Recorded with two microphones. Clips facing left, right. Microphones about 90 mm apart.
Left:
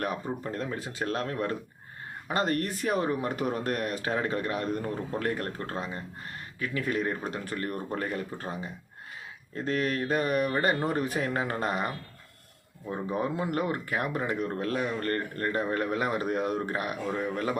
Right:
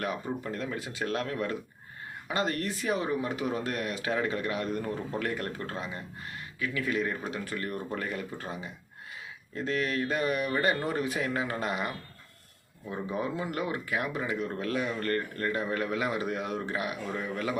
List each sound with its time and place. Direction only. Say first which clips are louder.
0.0 s speech: left 1 dB; 35° left (ahead or behind)
12.9 s speech: left 2 dB; 45° left (ahead or behind)